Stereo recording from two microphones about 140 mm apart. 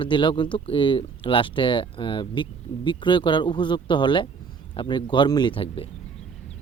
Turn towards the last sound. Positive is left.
turn(degrees=40)  # may be behind; listen again after turning